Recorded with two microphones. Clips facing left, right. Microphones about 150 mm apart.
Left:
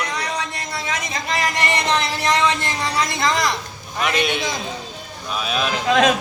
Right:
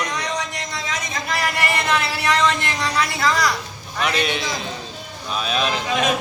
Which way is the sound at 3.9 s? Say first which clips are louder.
Left 1 dB; 5° left (ahead or behind).